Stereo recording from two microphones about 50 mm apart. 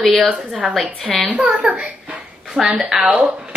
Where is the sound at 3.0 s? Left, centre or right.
Right.